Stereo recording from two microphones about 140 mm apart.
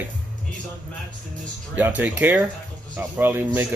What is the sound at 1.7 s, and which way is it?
Speech, 10° right (ahead or behind).